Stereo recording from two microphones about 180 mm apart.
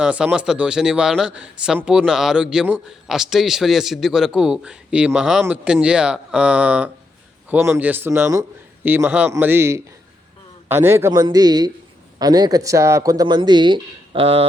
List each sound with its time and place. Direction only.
0.0 s a man's voice: 5° right (ahead or behind); by 14.4 s 30° right (ahead or behind)